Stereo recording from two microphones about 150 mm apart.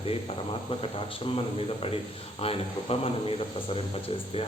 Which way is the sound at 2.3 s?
40° left (ahead or behind).